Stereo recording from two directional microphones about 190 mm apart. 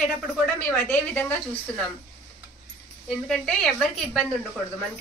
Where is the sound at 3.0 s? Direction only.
5° left (ahead or behind).